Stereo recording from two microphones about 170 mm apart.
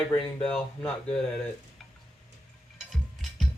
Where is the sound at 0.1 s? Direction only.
5° left (ahead or behind).